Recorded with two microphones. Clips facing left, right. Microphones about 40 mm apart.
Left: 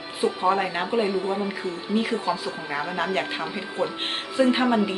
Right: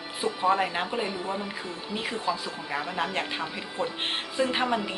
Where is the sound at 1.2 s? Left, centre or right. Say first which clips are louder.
Left 6 dB; left.